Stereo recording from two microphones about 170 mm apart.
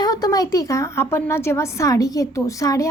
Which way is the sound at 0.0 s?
20° left (ahead or behind).